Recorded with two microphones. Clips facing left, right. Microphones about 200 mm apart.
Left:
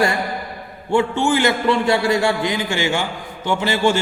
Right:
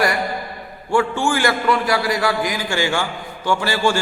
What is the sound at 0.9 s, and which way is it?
A man's voice, 20° left (ahead or behind).